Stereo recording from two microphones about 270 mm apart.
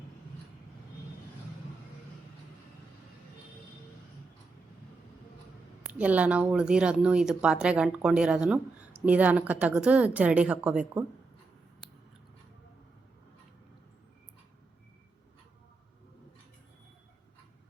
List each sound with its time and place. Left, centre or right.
5.8 s speech: centre